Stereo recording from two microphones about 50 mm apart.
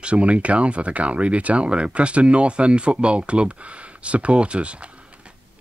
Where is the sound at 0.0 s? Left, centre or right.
Right.